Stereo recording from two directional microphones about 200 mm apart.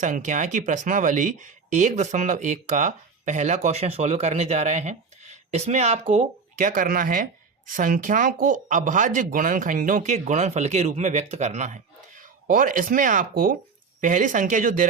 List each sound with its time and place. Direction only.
0.0 s speech: 40° right (ahead or behind)